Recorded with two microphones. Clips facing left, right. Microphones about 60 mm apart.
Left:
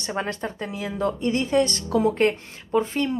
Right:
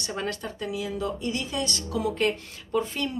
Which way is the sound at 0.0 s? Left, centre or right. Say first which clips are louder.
Left 4 dB; left.